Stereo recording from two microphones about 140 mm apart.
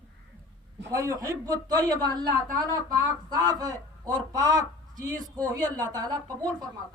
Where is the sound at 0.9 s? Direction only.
25° right (ahead or behind).